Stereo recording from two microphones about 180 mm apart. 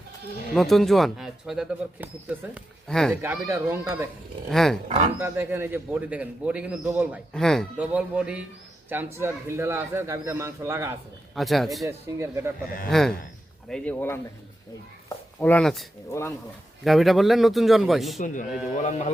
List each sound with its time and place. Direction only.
0.5 s speech: centre (ahead or behind)
2.8 s speech: 5° left (ahead or behind)
3.2 s a man's voice: 15° right (ahead or behind)
4.5 s speech: centre (ahead or behind)
5.2 s a man's voice: 15° right (ahead or behind)
7.3 s a man's voice: 5° left (ahead or behind); by 10.9 s 15° right (ahead or behind)
11.3 s speech: centre (ahead or behind)
11.9 s a man's voice: 15° right (ahead or behind)
12.9 s speech: centre (ahead or behind)
15.4 s speech: 10° left (ahead or behind)
16.0 s speech: 15° left (ahead or behind)
16.8 s speech: centre (ahead or behind)
18.7 s speech: 40° left (ahead or behind)